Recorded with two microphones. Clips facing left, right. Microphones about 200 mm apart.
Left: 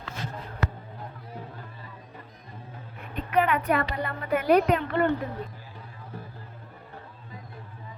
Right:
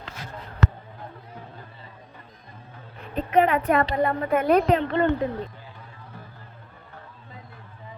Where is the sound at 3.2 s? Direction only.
30° right (ahead or behind).